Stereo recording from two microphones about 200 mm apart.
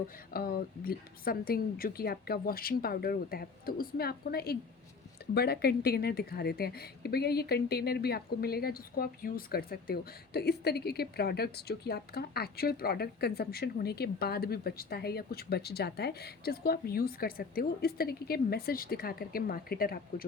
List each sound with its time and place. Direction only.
0.3 s a woman's voice: 50° left (ahead or behind)